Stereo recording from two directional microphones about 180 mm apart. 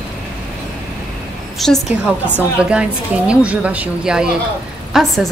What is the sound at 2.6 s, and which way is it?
A woman's voice, 5° right (ahead or behind).